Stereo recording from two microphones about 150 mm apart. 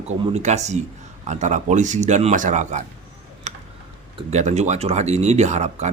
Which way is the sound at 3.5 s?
50° right (ahead or behind).